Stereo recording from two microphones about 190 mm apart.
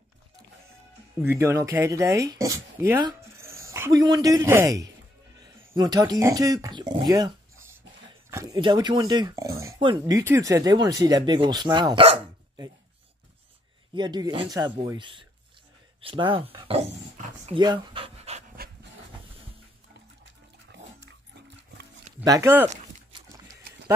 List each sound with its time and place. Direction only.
1.2 s speech: 15° right (ahead or behind)
8.3 s a sound: 15° right (ahead or behind)
8.5 s speech: 25° right (ahead or behind)
13.9 s speech: 20° right (ahead or behind)
17.6 s pant: 25° right (ahead or behind)
22.2 s speech: 15° right (ahead or behind)
23.2 s pig: 15° right (ahead or behind)